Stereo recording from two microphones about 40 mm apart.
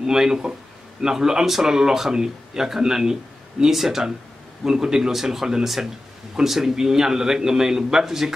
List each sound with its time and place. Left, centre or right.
0.0 s speech: centre